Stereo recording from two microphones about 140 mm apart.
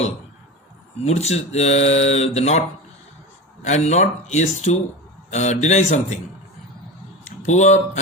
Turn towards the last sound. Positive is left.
turn(degrees=55)  # may be behind; listen again after turning